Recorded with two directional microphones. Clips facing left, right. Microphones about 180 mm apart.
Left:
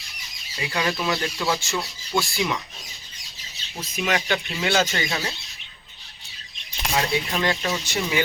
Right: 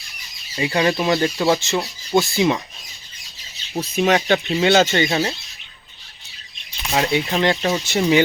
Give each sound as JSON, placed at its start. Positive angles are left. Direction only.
{"t": 0.6, "sound": "speech", "side_deg": -25}
{"t": 3.9, "sound": "speech", "side_deg": -30}
{"t": 6.9, "sound": "speech", "side_deg": -25}